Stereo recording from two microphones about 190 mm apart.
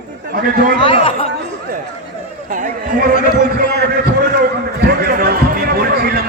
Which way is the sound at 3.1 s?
45° left (ahead or behind).